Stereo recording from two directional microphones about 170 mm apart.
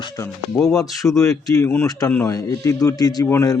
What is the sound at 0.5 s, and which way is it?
Speech, centre (ahead or behind).